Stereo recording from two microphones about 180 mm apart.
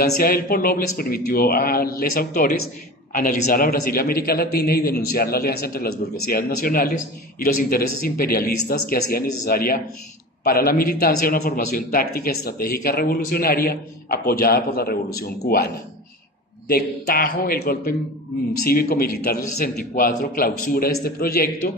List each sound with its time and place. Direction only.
0.0 s a man's voice: 60° left (ahead or behind)